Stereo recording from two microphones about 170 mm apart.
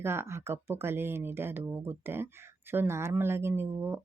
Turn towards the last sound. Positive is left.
turn(degrees=-15)  # may be behind; listen again after turning